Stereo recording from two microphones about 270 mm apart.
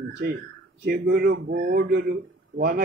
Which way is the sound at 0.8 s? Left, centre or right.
Right.